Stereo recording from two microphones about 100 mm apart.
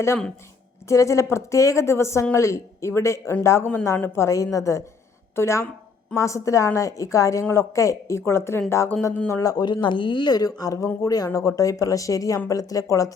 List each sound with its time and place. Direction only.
0.9 s a woman's voice: 30° left (ahead or behind)
9.4 s a woman's voice: 40° left (ahead or behind)